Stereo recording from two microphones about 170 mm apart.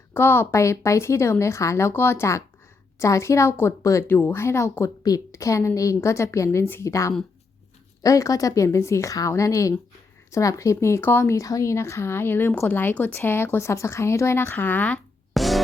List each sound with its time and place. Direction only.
0.1 s a woman's voice: 15° left (ahead or behind)